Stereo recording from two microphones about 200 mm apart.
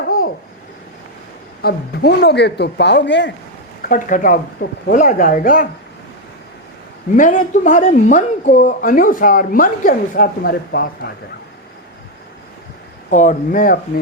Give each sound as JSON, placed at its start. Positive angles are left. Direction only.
{"t": 1.6, "sound": "speech", "side_deg": 50}
{"t": 3.8, "sound": "speech", "side_deg": 40}
{"t": 7.2, "sound": "speech", "side_deg": 40}
{"t": 13.1, "sound": "speech", "side_deg": 40}